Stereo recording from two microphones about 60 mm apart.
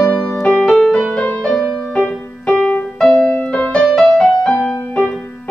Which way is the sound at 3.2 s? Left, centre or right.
Left.